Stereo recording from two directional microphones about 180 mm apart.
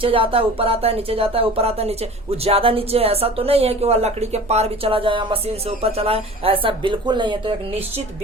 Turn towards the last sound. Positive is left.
turn(degrees=-25)  # may be behind; listen again after turning